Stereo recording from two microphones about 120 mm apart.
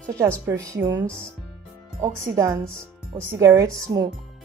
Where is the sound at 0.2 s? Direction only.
25° right (ahead or behind).